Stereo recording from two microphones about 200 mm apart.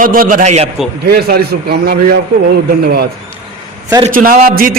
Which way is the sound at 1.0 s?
50° right (ahead or behind).